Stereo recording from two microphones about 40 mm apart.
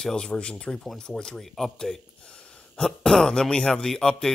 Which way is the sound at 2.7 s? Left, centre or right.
Centre.